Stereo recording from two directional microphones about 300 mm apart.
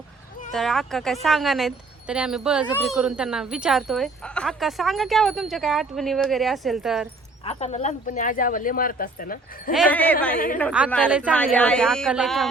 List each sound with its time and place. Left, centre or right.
0.5 s speech: centre
7.4 s speech: left
9.7 s speech: centre